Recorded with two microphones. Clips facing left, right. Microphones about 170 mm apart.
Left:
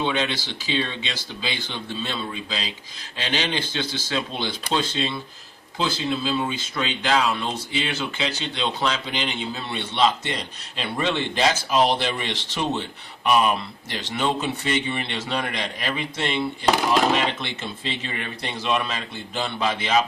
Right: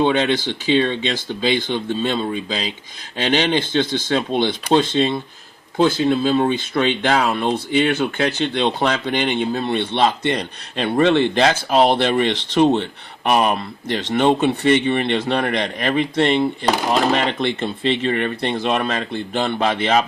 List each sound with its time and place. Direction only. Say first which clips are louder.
0.0 s speech: right 8 dB; 50° right (ahead or behind)